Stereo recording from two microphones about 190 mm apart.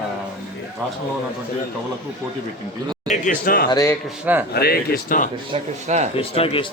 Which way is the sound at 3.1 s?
40° left (ahead or behind).